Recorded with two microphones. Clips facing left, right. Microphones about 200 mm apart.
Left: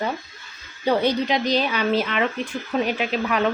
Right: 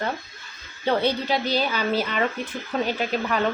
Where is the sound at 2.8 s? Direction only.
10° left (ahead or behind).